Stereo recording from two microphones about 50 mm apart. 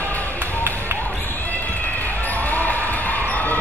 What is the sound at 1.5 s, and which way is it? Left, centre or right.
Basketball bounce, left.